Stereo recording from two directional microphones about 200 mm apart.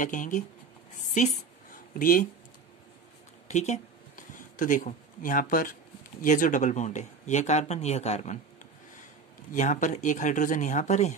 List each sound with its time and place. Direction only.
0.0 s speech: 40° left (ahead or behind)
3.4 s speech: 35° left (ahead or behind)
9.5 s speech: 40° left (ahead or behind)